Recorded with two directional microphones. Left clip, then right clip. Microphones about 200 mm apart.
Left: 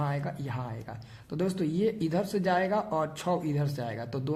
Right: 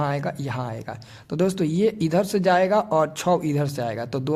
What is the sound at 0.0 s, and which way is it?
Speech, 40° right (ahead or behind).